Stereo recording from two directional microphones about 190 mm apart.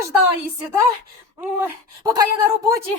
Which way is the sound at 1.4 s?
10° right (ahead or behind).